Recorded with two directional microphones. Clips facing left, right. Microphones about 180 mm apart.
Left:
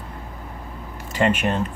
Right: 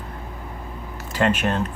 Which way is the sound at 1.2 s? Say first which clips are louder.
Left 1 dB; 5° left (ahead or behind).